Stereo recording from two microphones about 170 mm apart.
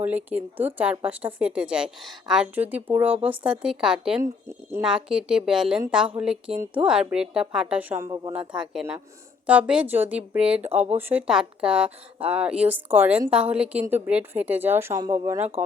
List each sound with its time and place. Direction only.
0.0 s a woman's voice: 10° right (ahead or behind)
4.2 s a woman's voice: 15° right (ahead or behind)
4.8 s a woman's voice: 5° right (ahead or behind); by 8.3 s 20° right (ahead or behind)
8.3 s a woman's voice: 5° right (ahead or behind)